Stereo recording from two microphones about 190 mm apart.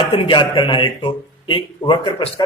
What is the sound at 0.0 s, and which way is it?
Speech, 30° left (ahead or behind).